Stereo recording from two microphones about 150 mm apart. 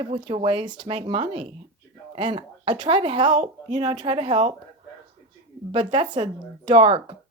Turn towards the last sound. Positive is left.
turn(degrees=-40)  # may be behind; listen again after turning